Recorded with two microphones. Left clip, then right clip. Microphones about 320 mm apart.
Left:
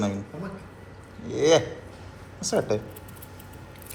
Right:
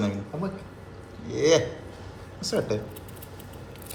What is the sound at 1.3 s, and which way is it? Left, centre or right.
A man's voice, centre.